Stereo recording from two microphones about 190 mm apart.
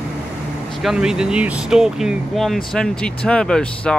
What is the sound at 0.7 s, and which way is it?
Speech, centre (ahead or behind).